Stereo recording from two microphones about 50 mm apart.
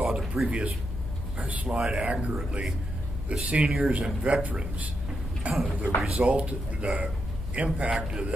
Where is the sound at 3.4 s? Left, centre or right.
Right.